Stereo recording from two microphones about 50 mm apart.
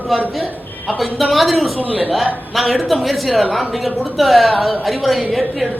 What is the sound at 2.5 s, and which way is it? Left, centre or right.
A woman's voice, centre.